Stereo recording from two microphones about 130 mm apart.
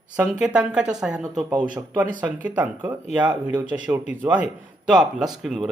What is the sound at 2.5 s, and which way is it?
Speech, 15° right (ahead or behind).